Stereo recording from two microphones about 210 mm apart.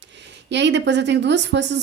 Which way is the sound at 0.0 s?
55° right (ahead or behind).